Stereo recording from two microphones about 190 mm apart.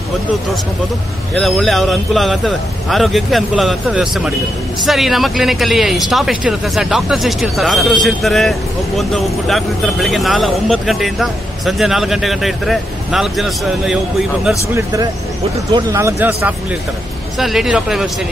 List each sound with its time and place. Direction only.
1.4 s speech: centre (ahead or behind)
14.7 s speech: 15° right (ahead or behind)